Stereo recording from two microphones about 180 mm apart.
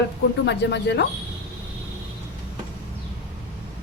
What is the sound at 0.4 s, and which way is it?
Speech, 75° left (ahead or behind).